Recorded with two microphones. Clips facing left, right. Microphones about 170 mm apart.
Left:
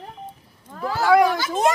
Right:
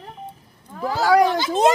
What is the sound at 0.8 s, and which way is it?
Speech, 15° right (ahead or behind).